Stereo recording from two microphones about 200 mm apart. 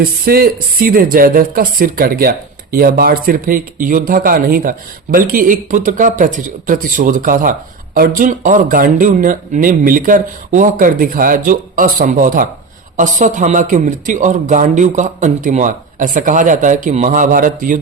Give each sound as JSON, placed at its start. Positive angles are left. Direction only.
{"t": 0.3, "sound": "a man's voice", "side_deg": -50}